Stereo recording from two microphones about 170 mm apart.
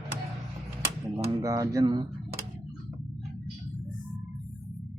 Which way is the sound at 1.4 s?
20° right (ahead or behind).